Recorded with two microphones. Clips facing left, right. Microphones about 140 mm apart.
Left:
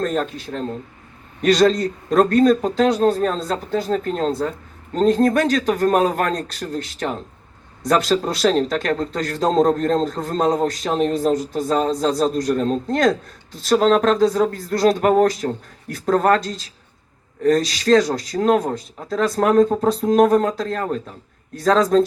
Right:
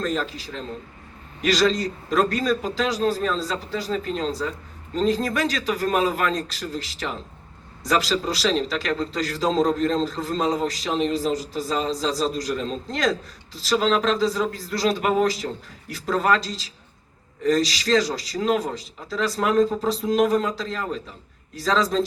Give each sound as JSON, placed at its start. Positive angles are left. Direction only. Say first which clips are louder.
{"t": 0.0, "sound": "a man's voice", "louder": "left 4 dB", "side_deg": 50}